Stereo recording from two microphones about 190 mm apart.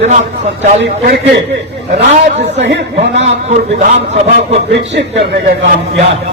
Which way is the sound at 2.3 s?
40° right (ahead or behind).